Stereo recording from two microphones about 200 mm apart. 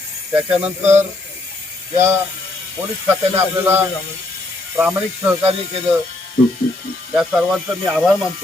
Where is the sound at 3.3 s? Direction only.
10° right (ahead or behind).